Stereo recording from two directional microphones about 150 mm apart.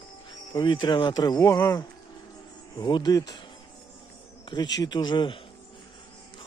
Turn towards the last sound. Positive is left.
turn(degrees=30)  # may be behind; listen again after turning